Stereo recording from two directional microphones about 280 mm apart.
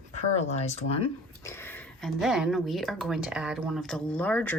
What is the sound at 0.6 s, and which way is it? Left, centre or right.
Speech, left.